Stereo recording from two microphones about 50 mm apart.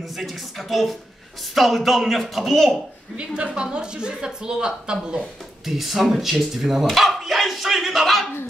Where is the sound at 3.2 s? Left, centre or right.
Centre.